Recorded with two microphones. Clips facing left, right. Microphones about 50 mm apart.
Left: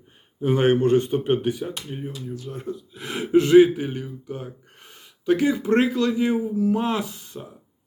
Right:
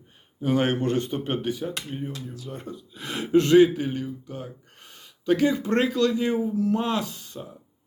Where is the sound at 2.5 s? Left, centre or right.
Centre.